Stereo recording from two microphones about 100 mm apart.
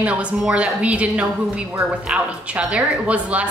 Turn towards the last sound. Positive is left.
turn(degrees=-15)  # may be behind; listen again after turning